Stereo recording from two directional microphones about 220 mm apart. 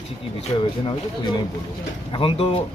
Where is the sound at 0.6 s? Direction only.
25° left (ahead or behind).